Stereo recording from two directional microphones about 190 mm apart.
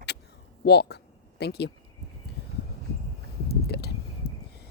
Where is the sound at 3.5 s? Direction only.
55° left (ahead or behind).